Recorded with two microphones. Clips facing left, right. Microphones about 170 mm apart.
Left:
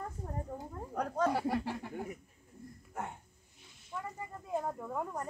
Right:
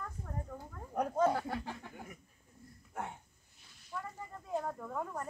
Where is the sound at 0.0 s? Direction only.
30° left (ahead or behind).